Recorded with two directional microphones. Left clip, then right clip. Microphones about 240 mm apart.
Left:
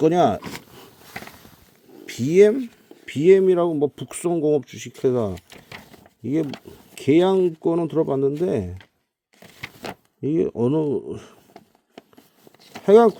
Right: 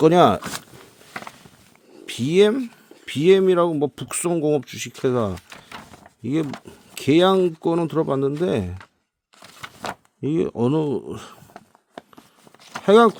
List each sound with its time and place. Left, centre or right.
0.0 s speech: right
2.0 s speech: centre
10.2 s speech: centre
12.8 s speech: centre